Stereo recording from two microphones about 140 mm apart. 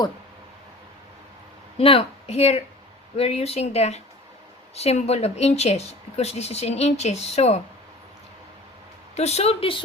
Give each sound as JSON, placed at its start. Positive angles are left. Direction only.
{"t": 1.8, "sound": "a woman's voice", "side_deg": 45}
{"t": 9.1, "sound": "a woman's voice", "side_deg": 50}